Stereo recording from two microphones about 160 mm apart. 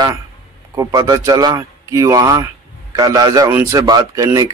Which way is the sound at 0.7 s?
20° right (ahead or behind).